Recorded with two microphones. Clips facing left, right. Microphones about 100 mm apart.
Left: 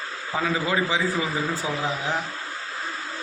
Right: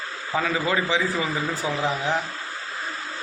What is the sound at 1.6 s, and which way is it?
Speech, 25° right (ahead or behind).